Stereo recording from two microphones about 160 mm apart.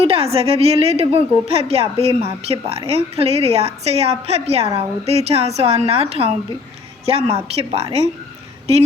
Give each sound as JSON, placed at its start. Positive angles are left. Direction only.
{"t": 0.0, "sound": "a woman's voice", "side_deg": -35}
{"t": 7.6, "sound": "a woman's voice", "side_deg": -30}